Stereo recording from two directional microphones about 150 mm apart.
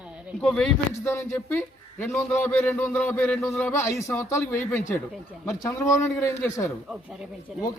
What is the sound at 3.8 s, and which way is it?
A man's voice, 20° left (ahead or behind).